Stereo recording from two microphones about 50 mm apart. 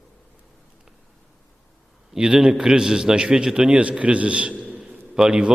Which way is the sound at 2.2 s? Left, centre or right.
Centre.